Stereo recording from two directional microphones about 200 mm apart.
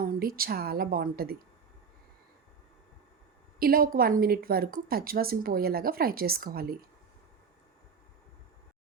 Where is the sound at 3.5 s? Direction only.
45° right (ahead or behind).